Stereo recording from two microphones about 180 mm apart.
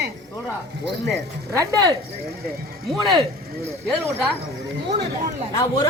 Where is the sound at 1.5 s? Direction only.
20° right (ahead or behind).